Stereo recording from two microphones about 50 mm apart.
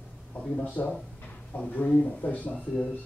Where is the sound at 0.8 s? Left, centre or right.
Left.